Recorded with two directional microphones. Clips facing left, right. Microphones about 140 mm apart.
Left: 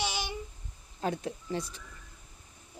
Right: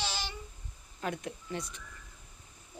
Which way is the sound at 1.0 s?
30° left (ahead or behind).